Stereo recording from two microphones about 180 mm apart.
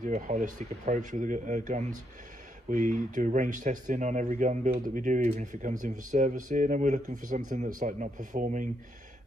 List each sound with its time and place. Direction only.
0.0 s speech: 40° right (ahead or behind)